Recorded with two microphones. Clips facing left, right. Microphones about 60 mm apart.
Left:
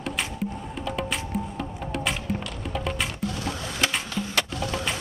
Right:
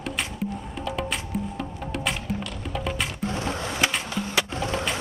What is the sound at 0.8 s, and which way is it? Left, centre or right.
Music, centre.